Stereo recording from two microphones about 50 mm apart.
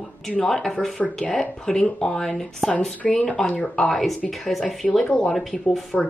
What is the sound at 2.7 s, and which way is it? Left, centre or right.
Speech, left.